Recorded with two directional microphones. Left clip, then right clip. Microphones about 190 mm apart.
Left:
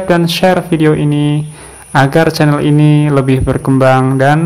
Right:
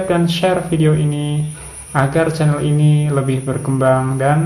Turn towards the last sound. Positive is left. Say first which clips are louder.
# left 6 dB
turn(degrees=45)  # may be behind; listen again after turning